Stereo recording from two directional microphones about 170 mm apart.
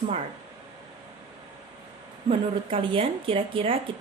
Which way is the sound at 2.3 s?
30° right (ahead or behind).